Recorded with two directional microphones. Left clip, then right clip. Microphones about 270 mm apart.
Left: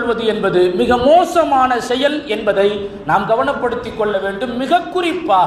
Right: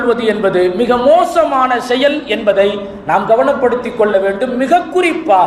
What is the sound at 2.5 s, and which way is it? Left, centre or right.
A man's voice, left.